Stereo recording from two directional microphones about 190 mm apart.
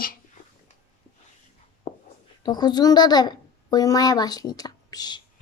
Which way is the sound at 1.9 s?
30° left (ahead or behind).